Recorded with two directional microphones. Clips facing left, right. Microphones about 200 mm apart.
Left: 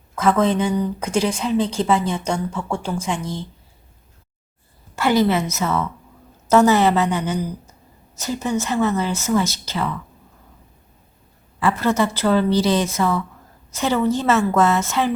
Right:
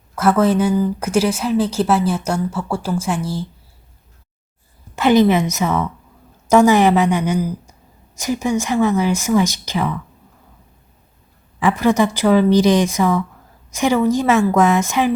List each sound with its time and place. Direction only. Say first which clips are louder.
0.2 s speech: right 3 dB; 5° right (ahead or behind)
4.9 s speech: right 4 dB; 20° right (ahead or behind)
11.6 s speech: right 4 dB; 15° right (ahead or behind)